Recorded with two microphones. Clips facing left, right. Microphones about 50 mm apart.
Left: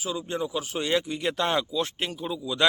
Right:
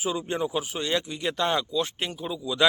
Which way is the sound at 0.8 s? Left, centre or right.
Centre.